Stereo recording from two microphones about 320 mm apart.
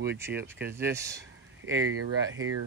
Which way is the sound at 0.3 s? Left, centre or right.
Right.